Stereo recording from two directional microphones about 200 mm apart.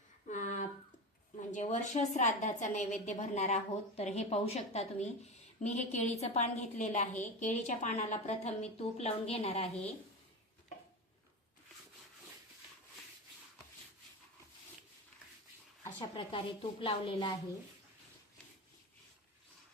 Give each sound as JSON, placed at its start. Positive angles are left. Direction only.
{"t": 0.3, "sound": "a sound", "side_deg": 40}
{"t": 1.4, "sound": "a woman's voice", "side_deg": 35}
{"t": 16.0, "sound": "a woman's voice", "side_deg": 25}